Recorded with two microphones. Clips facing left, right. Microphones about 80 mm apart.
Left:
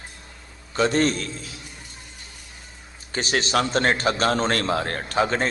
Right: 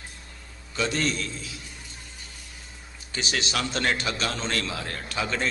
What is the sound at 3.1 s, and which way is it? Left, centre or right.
A man's voice, left.